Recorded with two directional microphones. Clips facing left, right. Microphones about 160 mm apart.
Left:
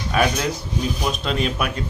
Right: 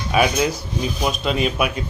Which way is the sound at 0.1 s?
10° right (ahead or behind).